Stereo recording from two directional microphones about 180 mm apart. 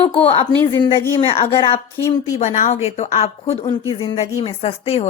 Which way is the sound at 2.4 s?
40° left (ahead or behind).